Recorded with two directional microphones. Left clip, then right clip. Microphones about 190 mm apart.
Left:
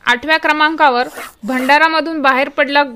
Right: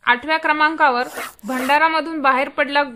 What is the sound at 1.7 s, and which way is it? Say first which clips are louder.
A woman's voice: left 5 dB; 35° left (ahead or behind).